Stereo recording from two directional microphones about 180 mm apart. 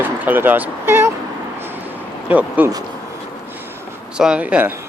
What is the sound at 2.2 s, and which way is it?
Speech, 10° right (ahead or behind).